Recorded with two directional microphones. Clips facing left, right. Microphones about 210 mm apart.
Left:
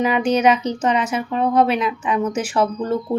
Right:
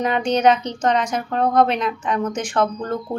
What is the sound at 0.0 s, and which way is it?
Speech, 5° left (ahead or behind).